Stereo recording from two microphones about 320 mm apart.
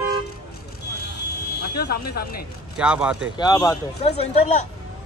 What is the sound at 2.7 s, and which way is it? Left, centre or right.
Speech, centre.